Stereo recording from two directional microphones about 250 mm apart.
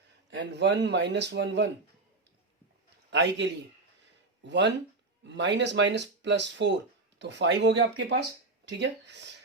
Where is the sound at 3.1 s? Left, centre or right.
Right.